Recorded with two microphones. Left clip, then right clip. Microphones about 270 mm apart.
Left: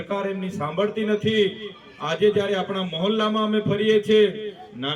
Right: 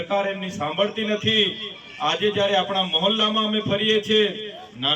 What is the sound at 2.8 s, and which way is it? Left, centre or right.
Speech, centre.